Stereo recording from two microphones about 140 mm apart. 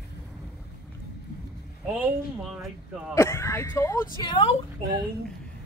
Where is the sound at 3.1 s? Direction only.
20° left (ahead or behind).